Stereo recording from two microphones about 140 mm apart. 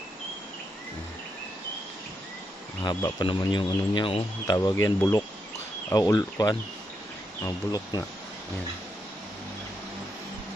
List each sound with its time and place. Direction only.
2.8 s speech: 30° left (ahead or behind)
4.6 s speech: 25° left (ahead or behind)